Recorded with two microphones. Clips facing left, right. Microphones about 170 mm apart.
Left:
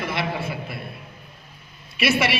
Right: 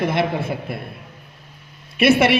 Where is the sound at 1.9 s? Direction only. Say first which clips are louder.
Right 7 dB; 55° right (ahead or behind).